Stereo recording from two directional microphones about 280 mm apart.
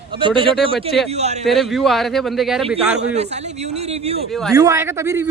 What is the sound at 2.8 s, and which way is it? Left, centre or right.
A man's voice, right.